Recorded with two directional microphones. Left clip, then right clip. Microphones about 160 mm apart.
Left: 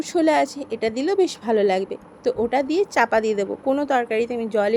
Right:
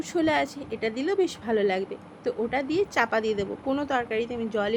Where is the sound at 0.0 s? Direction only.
35° left (ahead or behind).